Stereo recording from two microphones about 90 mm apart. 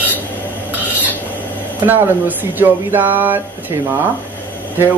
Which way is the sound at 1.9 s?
20° right (ahead or behind).